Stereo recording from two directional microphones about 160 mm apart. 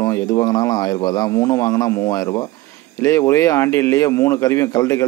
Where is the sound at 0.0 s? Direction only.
20° left (ahead or behind).